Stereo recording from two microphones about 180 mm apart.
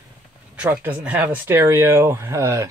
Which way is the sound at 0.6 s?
10° right (ahead or behind).